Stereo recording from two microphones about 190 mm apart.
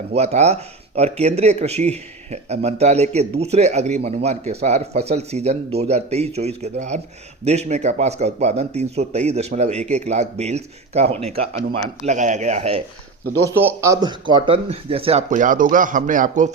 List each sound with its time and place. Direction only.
0.1 s speech: 35° right (ahead or behind)
13.5 s speech: 10° right (ahead or behind); by 15.2 s 30° right (ahead or behind)
15.3 s speech: 45° right (ahead or behind)